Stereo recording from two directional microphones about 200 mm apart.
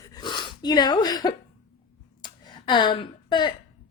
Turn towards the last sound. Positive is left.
turn(degrees=20)  # may be behind; listen again after turning